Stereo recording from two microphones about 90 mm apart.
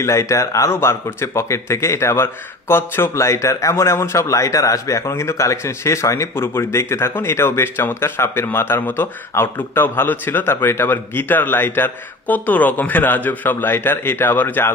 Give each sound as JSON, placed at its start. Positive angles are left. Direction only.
{"t": 0.0, "sound": "a man's voice", "side_deg": 35}